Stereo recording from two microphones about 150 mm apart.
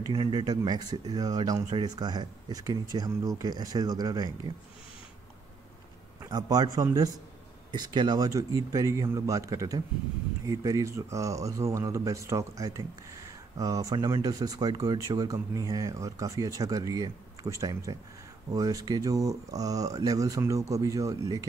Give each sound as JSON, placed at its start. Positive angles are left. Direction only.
{"t": 0.1, "sound": "speech", "side_deg": -30}
{"t": 6.2, "sound": "speech", "side_deg": -25}